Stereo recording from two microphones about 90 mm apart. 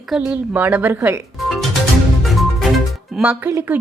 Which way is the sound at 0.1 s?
10° right (ahead or behind).